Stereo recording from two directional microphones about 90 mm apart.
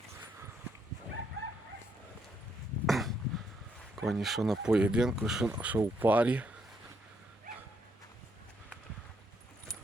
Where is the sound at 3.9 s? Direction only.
Centre (ahead or behind).